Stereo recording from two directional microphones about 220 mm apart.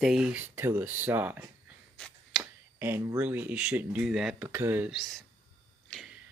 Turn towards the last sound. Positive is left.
turn(degrees=0)  # may be behind; listen again after turning